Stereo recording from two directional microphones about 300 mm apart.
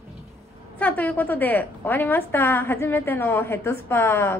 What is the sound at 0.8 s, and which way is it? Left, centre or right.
A woman's voice, centre.